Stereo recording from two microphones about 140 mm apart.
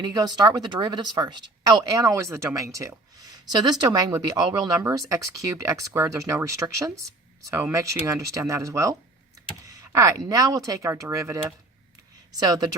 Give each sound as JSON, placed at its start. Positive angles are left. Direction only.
{"t": 0.0, "sound": "speech", "side_deg": -30}